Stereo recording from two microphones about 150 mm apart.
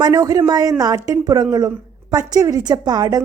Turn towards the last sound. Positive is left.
turn(degrees=-25)  # may be behind; listen again after turning